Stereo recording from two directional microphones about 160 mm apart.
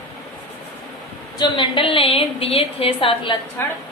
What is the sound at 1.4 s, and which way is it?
A woman's voice, 30° left (ahead or behind).